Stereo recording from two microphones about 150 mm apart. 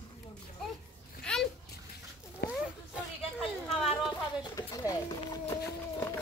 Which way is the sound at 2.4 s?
90° left.